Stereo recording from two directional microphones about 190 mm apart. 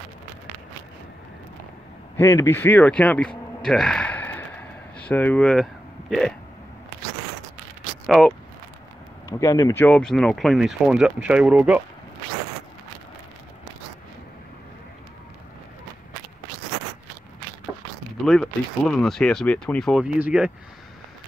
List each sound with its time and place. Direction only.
2.1 s speech: 15° left (ahead or behind)
8.1 s speech: centre (ahead or behind)
9.3 s speech: 20° left (ahead or behind)
9.8 s speech: 5° left (ahead or behind)
18.2 s speech: centre (ahead or behind)